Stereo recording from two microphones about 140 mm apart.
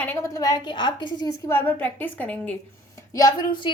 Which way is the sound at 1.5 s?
15° left (ahead or behind).